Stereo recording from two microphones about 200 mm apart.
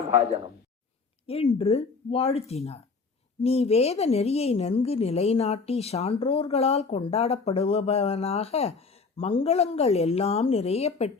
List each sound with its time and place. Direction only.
1.3 s speech: 30° left (ahead or behind)